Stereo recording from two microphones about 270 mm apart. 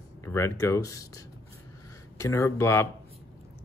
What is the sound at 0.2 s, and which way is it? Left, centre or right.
Speech, centre.